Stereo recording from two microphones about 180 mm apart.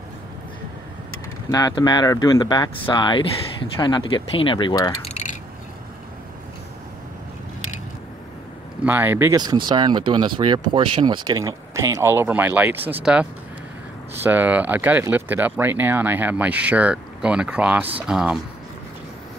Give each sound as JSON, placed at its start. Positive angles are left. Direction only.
{"t": 1.5, "sound": "speech", "side_deg": 20}
{"t": 5.1, "sound": "a sound", "side_deg": 45}
{"t": 8.8, "sound": "speech", "side_deg": -10}
{"t": 9.4, "sound": "speech", "side_deg": -25}